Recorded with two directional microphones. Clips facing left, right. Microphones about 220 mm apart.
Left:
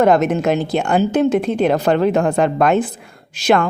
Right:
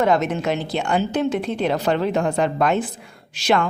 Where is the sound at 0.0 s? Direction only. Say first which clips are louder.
Left 5 dB; 50° left (ahead or behind).